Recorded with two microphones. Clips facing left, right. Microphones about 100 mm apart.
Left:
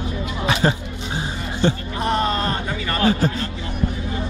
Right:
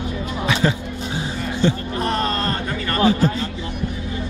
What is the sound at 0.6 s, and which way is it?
Speech, 40° left (ahead or behind).